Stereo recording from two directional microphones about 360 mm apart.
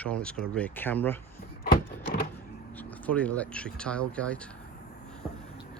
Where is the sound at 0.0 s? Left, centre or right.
Centre.